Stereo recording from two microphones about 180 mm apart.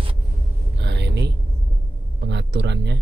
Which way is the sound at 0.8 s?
70° right (ahead or behind).